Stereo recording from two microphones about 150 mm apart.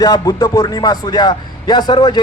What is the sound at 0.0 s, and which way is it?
Speech, 25° left (ahead or behind).